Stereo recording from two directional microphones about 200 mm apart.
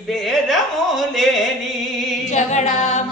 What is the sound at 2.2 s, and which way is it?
A capella, 35° left (ahead or behind).